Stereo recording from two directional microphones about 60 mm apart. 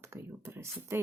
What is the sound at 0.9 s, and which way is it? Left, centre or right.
Speech, right.